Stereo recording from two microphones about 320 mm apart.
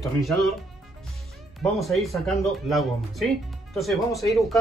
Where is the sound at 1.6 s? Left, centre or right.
Centre.